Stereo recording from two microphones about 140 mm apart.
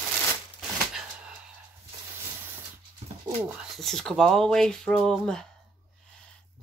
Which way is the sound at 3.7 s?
5° left (ahead or behind).